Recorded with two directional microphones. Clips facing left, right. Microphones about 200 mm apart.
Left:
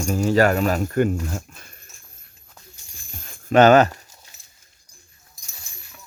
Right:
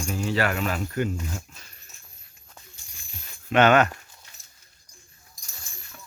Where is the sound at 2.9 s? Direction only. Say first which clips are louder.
Left 5 dB; 45° left (ahead or behind).